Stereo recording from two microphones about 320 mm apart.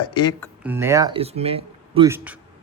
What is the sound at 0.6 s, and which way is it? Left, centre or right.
Speech, centre.